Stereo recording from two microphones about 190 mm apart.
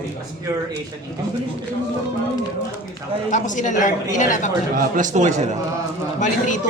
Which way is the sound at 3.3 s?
40° left (ahead or behind).